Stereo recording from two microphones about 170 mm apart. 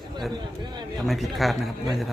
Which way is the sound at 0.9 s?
Centre (ahead or behind).